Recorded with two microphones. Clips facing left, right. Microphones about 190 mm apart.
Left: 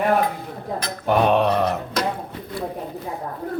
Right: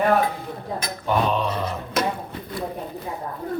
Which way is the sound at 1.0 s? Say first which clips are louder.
Left 5 dB; 60° left (ahead or behind).